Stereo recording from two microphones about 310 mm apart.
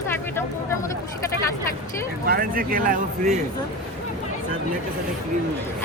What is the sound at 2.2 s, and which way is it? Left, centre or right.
Speech, right.